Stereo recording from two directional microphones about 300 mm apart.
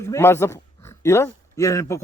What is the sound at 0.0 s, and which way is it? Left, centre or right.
A man's voice, centre.